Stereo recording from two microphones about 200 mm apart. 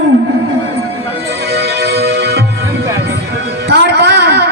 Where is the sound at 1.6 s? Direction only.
55° right (ahead or behind).